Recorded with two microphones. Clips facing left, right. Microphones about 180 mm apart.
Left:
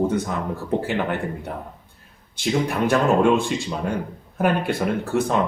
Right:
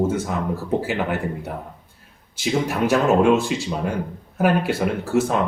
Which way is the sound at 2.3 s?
5° right (ahead or behind).